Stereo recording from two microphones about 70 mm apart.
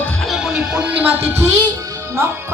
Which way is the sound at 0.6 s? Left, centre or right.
Centre.